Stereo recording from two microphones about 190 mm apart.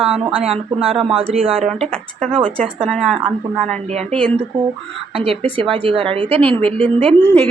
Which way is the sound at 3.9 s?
35° right (ahead or behind).